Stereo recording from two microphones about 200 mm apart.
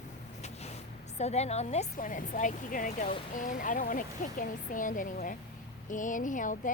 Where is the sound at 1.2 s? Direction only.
35° left (ahead or behind).